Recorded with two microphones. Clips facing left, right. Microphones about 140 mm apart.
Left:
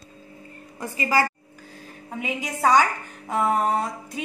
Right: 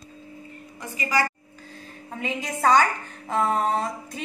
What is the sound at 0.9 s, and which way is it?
Speech, 35° left (ahead or behind).